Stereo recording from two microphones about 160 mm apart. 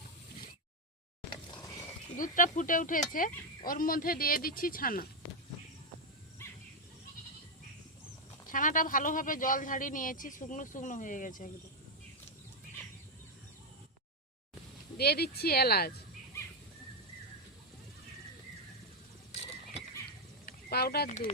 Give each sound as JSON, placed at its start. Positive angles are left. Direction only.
{"t": 1.3, "sound": "a sound", "side_deg": 30}
{"t": 2.1, "sound": "speech", "side_deg": 55}
{"t": 6.4, "sound": "dog", "side_deg": 15}
{"t": 8.4, "sound": "speech", "side_deg": 55}
{"t": 14.9, "sound": "speech", "side_deg": 80}
{"t": 20.4, "sound": "a sound", "side_deg": 75}
{"t": 21.1, "sound": "speech", "side_deg": 45}